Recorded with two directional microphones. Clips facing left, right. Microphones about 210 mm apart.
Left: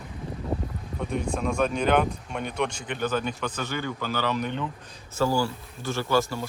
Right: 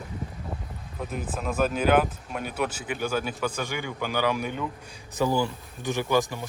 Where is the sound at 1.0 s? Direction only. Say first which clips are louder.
Left 4 dB; 5° right (ahead or behind).